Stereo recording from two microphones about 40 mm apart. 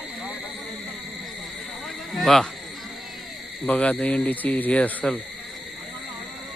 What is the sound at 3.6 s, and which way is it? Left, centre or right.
Speech, left.